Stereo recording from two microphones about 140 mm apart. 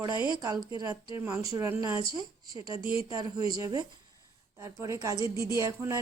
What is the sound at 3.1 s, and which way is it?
Speech, 25° right (ahead or behind).